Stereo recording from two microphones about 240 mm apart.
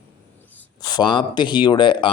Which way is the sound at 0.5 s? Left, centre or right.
Centre.